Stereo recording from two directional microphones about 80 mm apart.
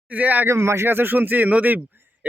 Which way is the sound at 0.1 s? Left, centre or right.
Right.